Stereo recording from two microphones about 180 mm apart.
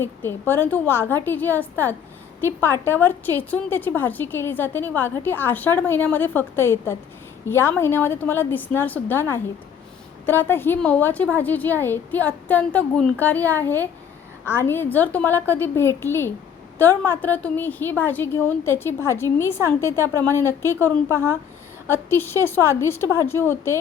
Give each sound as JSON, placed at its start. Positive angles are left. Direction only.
{"t": 0.0, "sound": "a woman's voice", "side_deg": 15}